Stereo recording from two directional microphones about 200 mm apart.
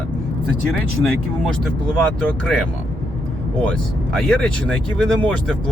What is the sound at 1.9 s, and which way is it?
Speech, 5° left (ahead or behind).